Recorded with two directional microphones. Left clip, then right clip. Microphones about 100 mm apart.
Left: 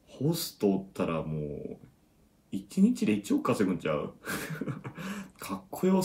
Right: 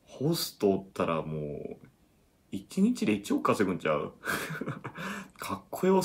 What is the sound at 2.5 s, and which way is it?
Speech, 35° right (ahead or behind).